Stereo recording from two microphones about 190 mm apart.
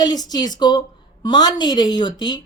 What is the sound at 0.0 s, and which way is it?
A woman's voice, 20° left (ahead or behind).